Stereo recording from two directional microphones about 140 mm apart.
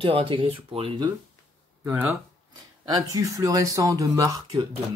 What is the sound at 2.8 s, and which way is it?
Speech, 25° right (ahead or behind).